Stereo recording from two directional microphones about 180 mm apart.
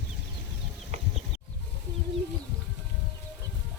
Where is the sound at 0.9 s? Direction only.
40° right (ahead or behind).